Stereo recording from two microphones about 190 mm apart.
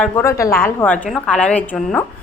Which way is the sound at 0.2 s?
15° left (ahead or behind).